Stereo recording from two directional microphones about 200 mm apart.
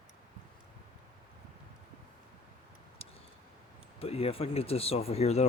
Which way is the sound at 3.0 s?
30° left (ahead or behind).